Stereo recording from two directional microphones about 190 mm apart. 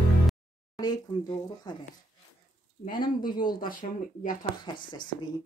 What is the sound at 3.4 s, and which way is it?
Speech, 45° left (ahead or behind).